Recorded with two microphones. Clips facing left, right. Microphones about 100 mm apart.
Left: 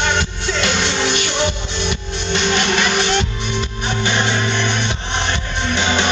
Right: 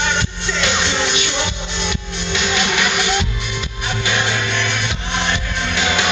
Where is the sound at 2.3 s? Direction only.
35° left (ahead or behind).